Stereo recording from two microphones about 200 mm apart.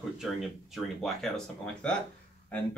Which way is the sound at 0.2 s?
Centre (ahead or behind).